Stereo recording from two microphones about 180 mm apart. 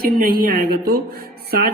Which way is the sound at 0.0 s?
55° right (ahead or behind).